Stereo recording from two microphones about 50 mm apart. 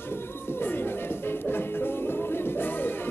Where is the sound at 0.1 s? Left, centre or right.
Left.